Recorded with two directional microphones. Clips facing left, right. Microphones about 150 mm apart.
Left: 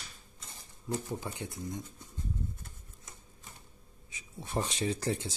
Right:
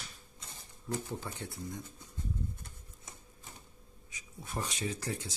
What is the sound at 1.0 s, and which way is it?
Speech, 15° left (ahead or behind).